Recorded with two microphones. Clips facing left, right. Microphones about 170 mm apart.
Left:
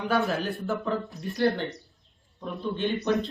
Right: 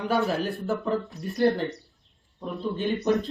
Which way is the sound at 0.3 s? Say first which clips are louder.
Right 2 dB; centre (ahead or behind).